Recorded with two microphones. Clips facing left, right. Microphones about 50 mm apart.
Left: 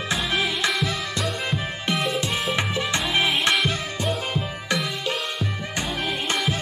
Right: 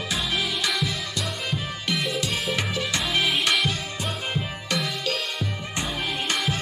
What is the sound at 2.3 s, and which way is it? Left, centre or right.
Music, centre.